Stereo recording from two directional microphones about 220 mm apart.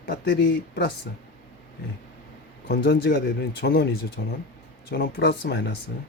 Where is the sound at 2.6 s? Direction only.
50° left (ahead or behind).